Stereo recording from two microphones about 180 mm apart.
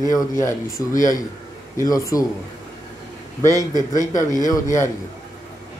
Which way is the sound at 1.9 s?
20° left (ahead or behind).